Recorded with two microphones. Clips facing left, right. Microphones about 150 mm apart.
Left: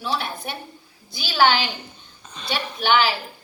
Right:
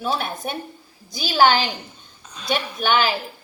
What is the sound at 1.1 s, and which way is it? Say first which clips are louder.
Speech: right 2 dB; 40° right (ahead or behind).